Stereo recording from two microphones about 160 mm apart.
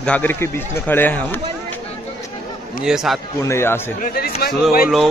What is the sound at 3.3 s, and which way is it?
Speech, 15° left (ahead or behind).